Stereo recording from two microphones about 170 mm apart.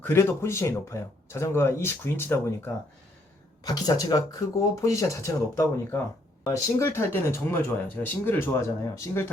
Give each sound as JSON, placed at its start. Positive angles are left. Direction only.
{"t": 0.0, "sound": "speech", "side_deg": 15}